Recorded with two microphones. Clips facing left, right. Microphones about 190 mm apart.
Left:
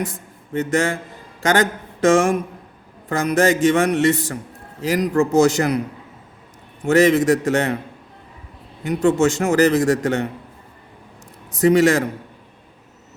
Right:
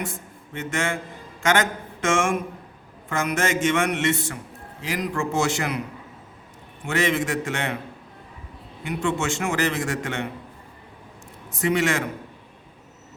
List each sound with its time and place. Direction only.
0.0 s a man's voice: 40° left (ahead or behind)
6.8 s a man's voice: 40° left (ahead or behind)
8.8 s a man's voice: 40° left (ahead or behind)
11.5 s a man's voice: 40° left (ahead or behind)